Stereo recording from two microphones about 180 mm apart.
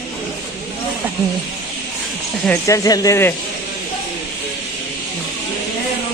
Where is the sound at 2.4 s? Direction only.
15° left (ahead or behind).